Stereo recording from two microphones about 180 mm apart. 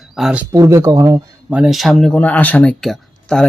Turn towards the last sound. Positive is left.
turn(degrees=0)  # may be behind; listen again after turning